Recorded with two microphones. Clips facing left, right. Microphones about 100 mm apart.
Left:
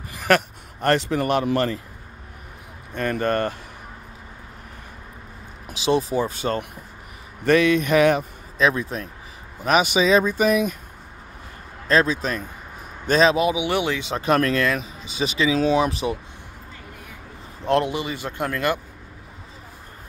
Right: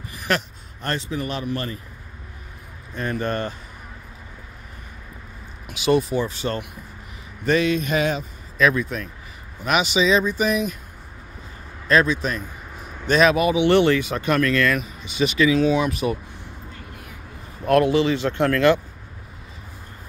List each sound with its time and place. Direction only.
0.3 s speech: 55° left (ahead or behind)
2.9 s mantra: 55° left (ahead or behind)
5.7 s speech: 30° left (ahead or behind)
6.1 s speech: 45° left (ahead or behind)
7.4 s mantra: 55° left (ahead or behind)
8.5 s speech: 30° left (ahead or behind)
9.7 s speech: 45° left (ahead or behind)
11.9 s speech: 35° left (ahead or behind)
13.3 s speech: 20° left (ahead or behind)
13.6 s speech: 10° left (ahead or behind)
14.0 s speech: 30° left (ahead or behind)
17.6 s speech: 20° left (ahead or behind)